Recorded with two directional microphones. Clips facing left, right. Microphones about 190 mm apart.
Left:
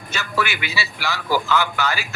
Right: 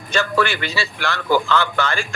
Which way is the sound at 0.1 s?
10° left (ahead or behind).